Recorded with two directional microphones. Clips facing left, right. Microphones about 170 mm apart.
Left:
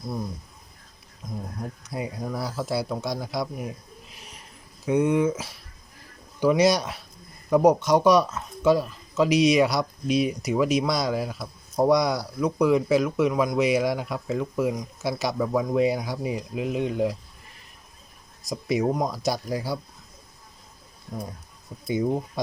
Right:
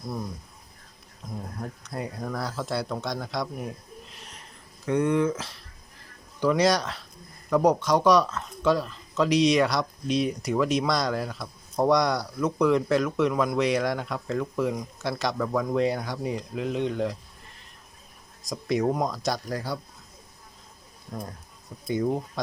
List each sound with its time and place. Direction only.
1.9 s speech: 10° left (ahead or behind)
4.1 s a sound: 5° left (ahead or behind)
4.9 s a man's voice: 10° left (ahead or behind)
18.7 s speech: 5° left (ahead or behind)